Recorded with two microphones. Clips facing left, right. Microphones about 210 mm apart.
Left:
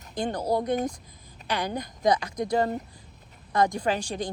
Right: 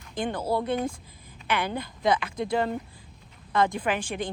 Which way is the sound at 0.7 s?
40° left (ahead or behind).